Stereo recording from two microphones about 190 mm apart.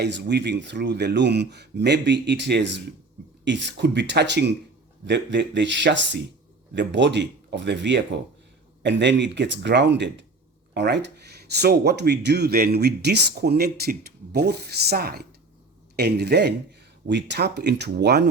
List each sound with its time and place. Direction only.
0.0 s speech: 65° right (ahead or behind)